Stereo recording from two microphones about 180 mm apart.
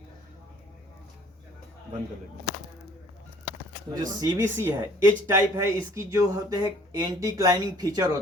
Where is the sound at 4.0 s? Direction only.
20° right (ahead or behind).